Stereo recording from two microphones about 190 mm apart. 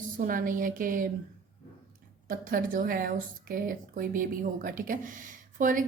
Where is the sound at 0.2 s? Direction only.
45° right (ahead or behind).